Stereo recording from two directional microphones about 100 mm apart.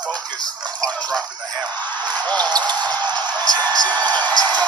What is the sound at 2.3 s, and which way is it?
Speech, 45° right (ahead or behind).